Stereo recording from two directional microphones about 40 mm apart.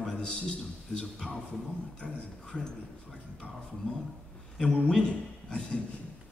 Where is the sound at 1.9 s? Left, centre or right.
Left.